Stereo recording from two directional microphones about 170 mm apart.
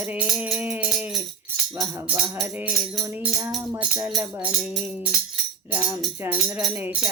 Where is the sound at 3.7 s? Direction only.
15° right (ahead or behind).